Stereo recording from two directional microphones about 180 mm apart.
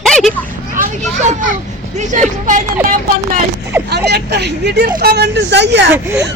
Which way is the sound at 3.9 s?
65° right (ahead or behind).